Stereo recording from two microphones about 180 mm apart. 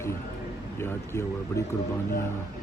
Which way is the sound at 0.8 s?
15° left (ahead or behind).